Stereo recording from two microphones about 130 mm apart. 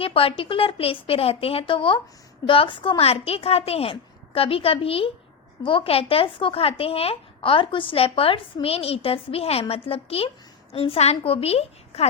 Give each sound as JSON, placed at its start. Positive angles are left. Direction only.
{"t": 0.0, "sound": "a woman's voice", "side_deg": 45}